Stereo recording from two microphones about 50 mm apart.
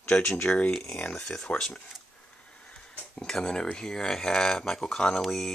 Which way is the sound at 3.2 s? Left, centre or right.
Centre.